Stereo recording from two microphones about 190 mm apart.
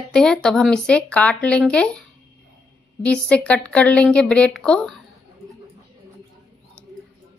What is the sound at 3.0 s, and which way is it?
A woman's voice, 5° left (ahead or behind).